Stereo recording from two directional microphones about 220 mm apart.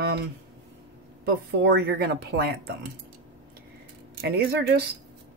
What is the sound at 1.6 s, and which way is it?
Speech, 50° right (ahead or behind).